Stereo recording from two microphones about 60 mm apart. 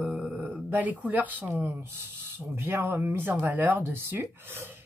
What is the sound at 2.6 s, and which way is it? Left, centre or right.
Speech, right.